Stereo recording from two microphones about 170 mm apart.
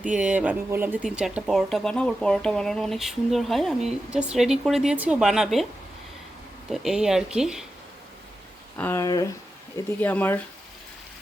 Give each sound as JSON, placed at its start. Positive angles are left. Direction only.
{"t": 0.0, "sound": "speech", "side_deg": -5}
{"t": 6.7, "sound": "speech", "side_deg": -5}
{"t": 8.8, "sound": "speech", "side_deg": 15}
{"t": 9.7, "sound": "speech", "side_deg": 10}